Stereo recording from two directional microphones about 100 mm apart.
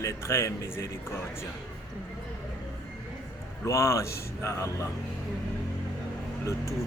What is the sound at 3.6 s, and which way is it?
A man's voice, 30° left (ahead or behind).